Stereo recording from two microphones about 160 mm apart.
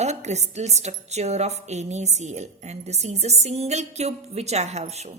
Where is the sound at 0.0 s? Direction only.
45° right (ahead or behind).